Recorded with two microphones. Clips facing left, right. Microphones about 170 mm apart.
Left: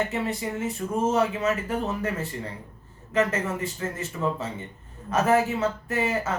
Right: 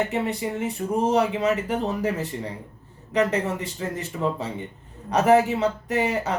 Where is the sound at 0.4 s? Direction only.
20° right (ahead or behind).